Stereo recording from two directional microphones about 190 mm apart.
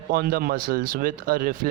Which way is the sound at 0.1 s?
50° right (ahead or behind).